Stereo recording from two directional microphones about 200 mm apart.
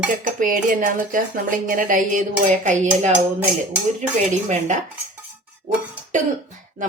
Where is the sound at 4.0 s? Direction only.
35° right (ahead or behind).